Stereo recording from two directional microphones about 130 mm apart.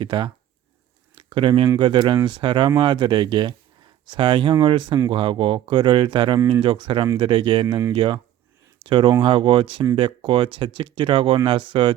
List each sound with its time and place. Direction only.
0.0 s speech: 40° right (ahead or behind)
1.1 s a sound: 40° right (ahead or behind)
1.8 s speech: 40° right (ahead or behind)